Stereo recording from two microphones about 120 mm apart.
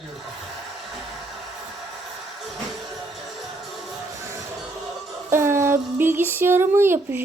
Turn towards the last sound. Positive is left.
turn(degrees=-20)  # may be behind; listen again after turning